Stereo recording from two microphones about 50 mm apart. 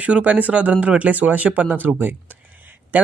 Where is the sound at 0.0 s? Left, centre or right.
Right.